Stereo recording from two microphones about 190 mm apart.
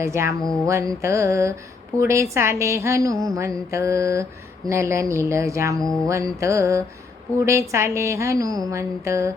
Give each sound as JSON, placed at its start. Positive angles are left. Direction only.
{"t": 0.0, "sound": "a woman's voice", "side_deg": -15}
{"t": 0.4, "sound": "a sound", "side_deg": 5}
{"t": 0.7, "sound": "a woman's voice", "side_deg": -15}